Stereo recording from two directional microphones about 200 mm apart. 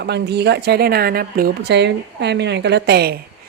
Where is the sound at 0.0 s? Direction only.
55° right (ahead or behind).